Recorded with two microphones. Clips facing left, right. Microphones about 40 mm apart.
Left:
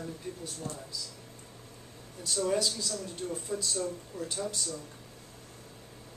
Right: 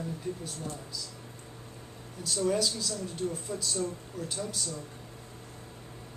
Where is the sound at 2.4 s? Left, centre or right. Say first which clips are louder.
Right 2 dB; centre.